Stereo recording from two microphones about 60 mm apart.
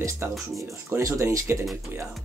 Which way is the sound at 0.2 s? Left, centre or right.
Right.